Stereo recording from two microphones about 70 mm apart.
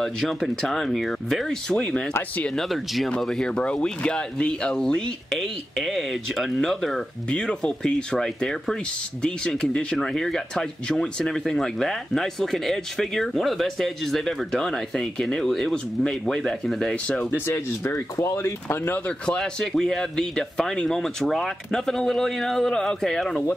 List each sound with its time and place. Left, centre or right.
0.0 s speech: centre
2.5 s speech: centre
7.2 s speech: centre
17.5 s speech: left
19.0 s speech: centre